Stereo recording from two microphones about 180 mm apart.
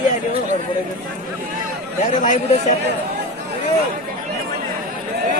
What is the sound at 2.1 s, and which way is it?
Speech, 45° left (ahead or behind).